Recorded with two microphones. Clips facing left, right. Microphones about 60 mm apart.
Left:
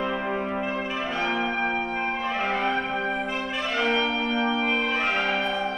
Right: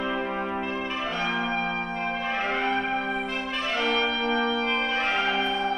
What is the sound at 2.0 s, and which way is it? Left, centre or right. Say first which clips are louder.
Music: left 2 dB; centre.